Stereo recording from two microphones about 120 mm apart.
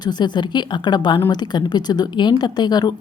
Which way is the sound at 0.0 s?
40° left (ahead or behind).